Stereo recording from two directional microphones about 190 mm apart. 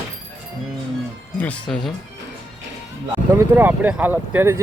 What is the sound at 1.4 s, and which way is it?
Speech, 5° left (ahead or behind).